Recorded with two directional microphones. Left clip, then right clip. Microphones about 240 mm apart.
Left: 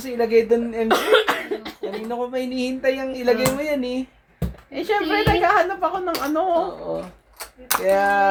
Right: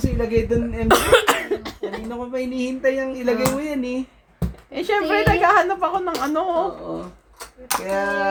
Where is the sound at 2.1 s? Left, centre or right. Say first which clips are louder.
Left 3 dB; left.